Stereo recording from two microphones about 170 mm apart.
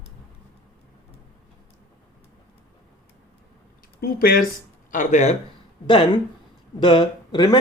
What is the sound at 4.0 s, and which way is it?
Speech, 60° left (ahead or behind).